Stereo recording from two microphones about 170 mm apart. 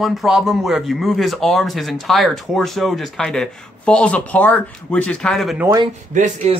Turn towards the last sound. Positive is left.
turn(degrees=-45)  # may be behind; listen again after turning